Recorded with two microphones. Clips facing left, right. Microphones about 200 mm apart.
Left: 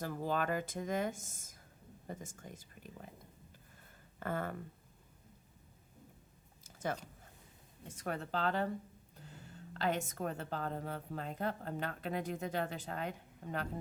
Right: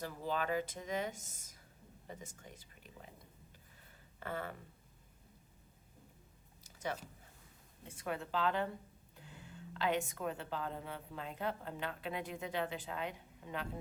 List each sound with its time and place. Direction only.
0.0 s a woman's voice: 50° left (ahead or behind)
4.2 s a woman's voice: 50° left (ahead or behind)
6.7 s a sound: 45° left (ahead or behind)
7.9 s a woman's voice: 45° left (ahead or behind)